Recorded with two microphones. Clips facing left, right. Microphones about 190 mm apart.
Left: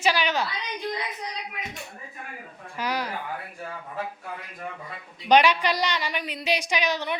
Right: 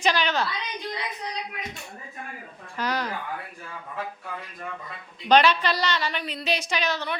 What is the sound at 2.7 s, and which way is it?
Speech, 10° left (ahead or behind).